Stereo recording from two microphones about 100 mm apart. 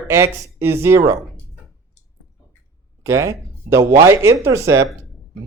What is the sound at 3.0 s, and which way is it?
Speech, 30° right (ahead or behind).